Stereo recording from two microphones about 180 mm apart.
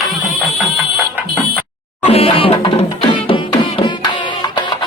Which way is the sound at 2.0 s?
35° left (ahead or behind).